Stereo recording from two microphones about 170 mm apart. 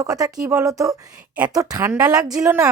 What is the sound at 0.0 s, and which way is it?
A woman's voice, 20° right (ahead or behind).